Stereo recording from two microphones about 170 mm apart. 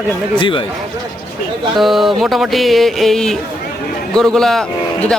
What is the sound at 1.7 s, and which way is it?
Speech, centre (ahead or behind).